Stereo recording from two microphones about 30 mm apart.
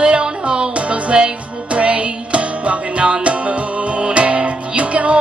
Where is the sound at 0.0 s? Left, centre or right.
Right.